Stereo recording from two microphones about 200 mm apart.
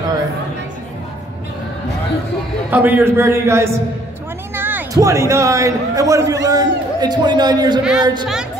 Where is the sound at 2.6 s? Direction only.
10° right (ahead or behind).